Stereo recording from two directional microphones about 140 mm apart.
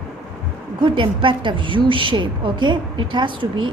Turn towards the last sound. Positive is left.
turn(degrees=-35)  # may be behind; listen again after turning